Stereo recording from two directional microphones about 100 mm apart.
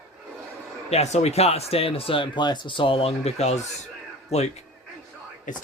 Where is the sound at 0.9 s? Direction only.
90° left.